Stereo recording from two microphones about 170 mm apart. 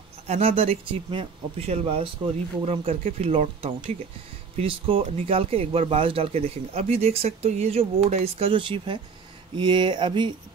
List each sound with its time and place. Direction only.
0.3 s speech: 35° right (ahead or behind)